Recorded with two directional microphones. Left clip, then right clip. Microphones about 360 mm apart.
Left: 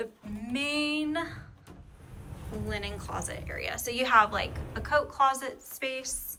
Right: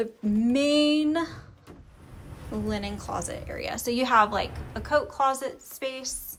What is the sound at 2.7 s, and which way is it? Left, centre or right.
A woman's voice, centre.